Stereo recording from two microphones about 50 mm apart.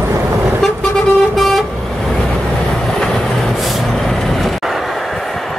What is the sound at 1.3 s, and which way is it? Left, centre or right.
Vehicle, centre.